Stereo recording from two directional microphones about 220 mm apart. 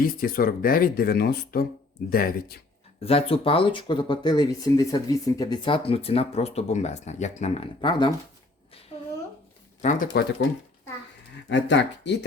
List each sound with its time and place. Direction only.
0.0 s speech: 40° left (ahead or behind)
3.0 s speech: 25° left (ahead or behind)
8.9 s a sound: 25° left (ahead or behind)
9.8 s speech: 40° left (ahead or behind)
11.4 s speech: 55° left (ahead or behind)